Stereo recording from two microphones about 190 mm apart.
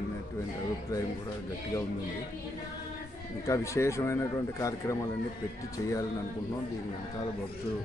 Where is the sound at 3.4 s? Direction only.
15° left (ahead or behind).